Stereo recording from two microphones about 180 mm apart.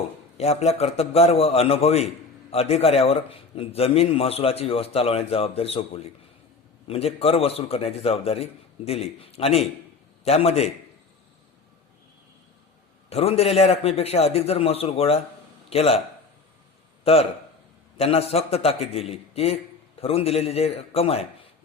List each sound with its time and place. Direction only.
0.3 s a man's voice: 35° left (ahead or behind)
13.1 s a man's voice: 35° left (ahead or behind)
17.0 s a man's voice: 35° left (ahead or behind)